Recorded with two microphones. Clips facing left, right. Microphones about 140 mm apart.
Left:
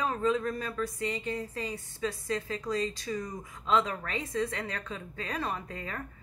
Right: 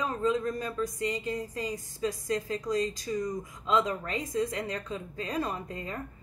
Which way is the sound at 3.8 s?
35° right (ahead or behind).